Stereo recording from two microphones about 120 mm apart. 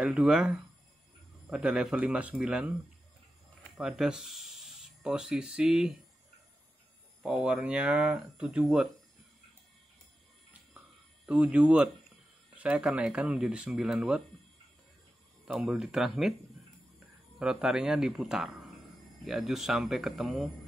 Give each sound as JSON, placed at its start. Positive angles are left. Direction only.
{"t": 0.0, "sound": "speech", "side_deg": -5}
{"t": 3.7, "sound": "speech", "side_deg": -5}
{"t": 7.2, "sound": "speech", "side_deg": -5}
{"t": 11.2, "sound": "speech", "side_deg": -10}
{"t": 15.4, "sound": "speech", "side_deg": 0}
{"t": 17.4, "sound": "speech", "side_deg": -5}